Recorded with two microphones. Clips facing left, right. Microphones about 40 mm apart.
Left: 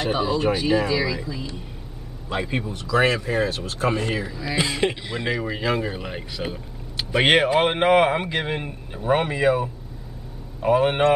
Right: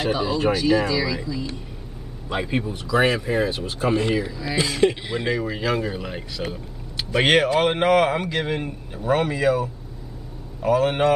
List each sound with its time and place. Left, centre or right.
0.1 s speech: centre
0.5 s a man's voice: left
2.2 s speech: centre
2.7 s speech: centre
4.6 s a man's voice: centre
5.1 s a man's voice: centre